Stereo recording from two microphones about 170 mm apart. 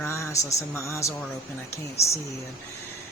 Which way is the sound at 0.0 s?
15° left (ahead or behind).